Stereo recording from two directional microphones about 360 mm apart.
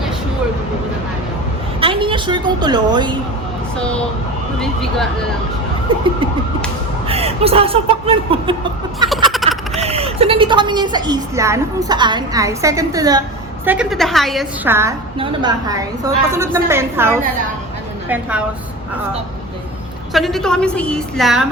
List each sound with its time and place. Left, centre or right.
1.8 s a woman's voice: centre
4.6 s a woman's voice: centre
7.1 s a woman's voice: centre
9.0 s a sound: centre
9.7 s a woman's voice: centre
20.1 s a woman's voice: centre